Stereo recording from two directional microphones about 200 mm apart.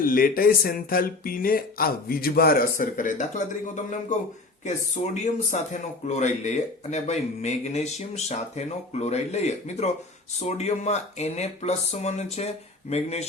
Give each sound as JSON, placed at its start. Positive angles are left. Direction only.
{"t": 0.0, "sound": "speech", "side_deg": 45}
{"t": 4.6, "sound": "speech", "side_deg": 35}